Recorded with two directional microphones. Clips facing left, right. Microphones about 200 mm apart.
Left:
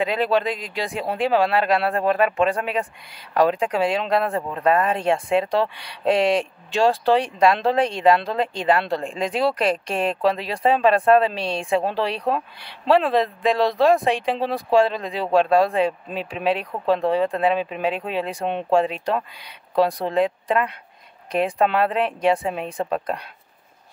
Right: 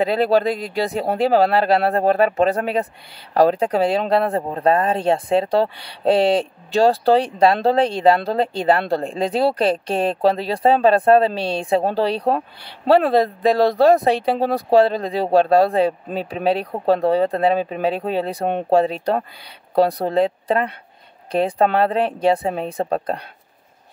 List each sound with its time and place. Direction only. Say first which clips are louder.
0.0 s speech: right 4 dB; 40° right (ahead or behind)